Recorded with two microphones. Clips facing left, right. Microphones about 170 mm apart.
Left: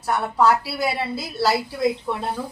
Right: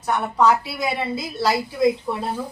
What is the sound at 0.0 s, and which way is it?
A woman's voice, 5° left (ahead or behind).